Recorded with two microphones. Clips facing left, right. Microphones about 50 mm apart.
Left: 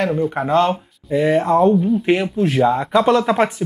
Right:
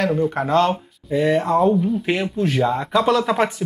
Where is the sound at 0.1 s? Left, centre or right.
Centre.